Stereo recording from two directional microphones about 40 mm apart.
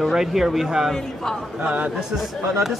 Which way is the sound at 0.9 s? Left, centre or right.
Centre.